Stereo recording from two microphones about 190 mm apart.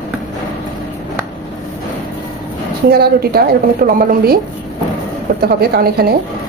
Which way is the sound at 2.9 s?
55° right (ahead or behind).